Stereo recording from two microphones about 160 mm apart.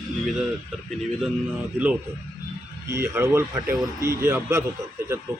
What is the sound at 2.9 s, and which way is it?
Speech, 15° right (ahead or behind).